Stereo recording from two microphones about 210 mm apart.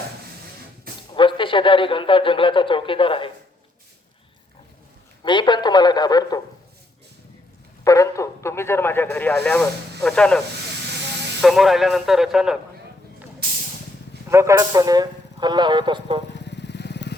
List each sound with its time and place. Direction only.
1.1 s a man's voice: 25° left (ahead or behind)
5.2 s a man's voice: 20° left (ahead or behind)
7.9 s speech: 15° left (ahead or behind); by 12.5 s centre (ahead or behind)
14.3 s speech: 15° right (ahead or behind)
16.3 s vehicle: 55° left (ahead or behind)